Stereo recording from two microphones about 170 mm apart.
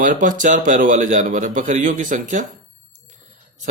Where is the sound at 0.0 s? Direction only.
50° right (ahead or behind).